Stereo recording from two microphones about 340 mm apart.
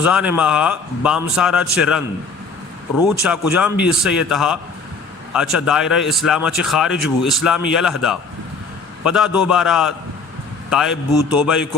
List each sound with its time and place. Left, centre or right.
0.0 s speech: centre
3.2 s speech: centre